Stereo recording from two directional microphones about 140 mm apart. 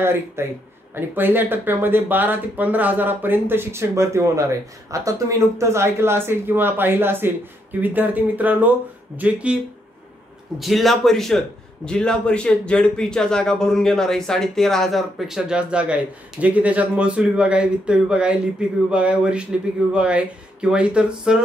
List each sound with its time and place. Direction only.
0.0 s speech: 15° right (ahead or behind)
10.6 s a man's voice: centre (ahead or behind)